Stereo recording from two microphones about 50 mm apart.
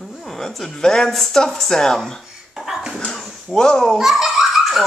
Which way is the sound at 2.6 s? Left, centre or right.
Centre.